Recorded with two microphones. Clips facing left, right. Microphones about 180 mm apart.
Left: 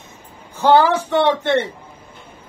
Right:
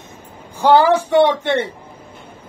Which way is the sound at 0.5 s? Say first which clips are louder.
Right 1 dB; 10° right (ahead or behind).